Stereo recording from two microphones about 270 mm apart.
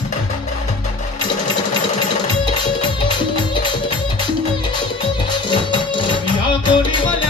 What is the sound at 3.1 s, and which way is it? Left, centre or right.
Music, centre.